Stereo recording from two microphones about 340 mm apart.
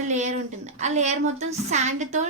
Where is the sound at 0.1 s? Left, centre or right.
Centre.